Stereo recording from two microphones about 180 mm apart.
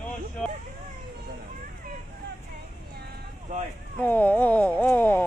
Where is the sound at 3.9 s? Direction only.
10° left (ahead or behind).